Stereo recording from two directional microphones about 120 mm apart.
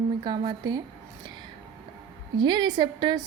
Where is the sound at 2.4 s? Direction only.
35° right (ahead or behind).